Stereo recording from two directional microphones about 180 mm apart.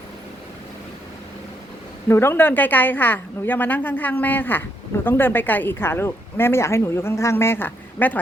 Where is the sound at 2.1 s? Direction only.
15° left (ahead or behind).